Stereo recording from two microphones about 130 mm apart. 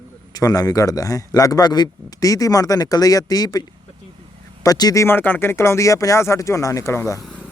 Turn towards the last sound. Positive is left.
turn(degrees=20)  # may be behind; listen again after turning